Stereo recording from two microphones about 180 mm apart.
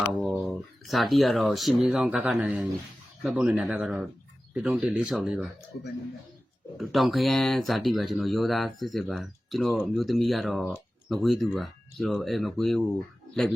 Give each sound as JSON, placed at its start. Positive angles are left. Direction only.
{"t": 0.2, "sound": "speech", "side_deg": 0}
{"t": 5.7, "sound": "speech", "side_deg": 65}
{"t": 6.7, "sound": "speech", "side_deg": 0}